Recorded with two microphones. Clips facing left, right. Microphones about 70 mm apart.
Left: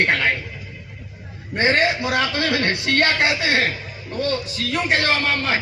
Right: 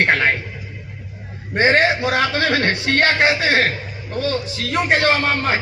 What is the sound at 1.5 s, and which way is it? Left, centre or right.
A man's voice, right.